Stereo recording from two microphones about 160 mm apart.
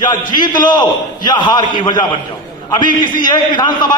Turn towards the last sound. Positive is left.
turn(degrees=30)  # may be behind; listen again after turning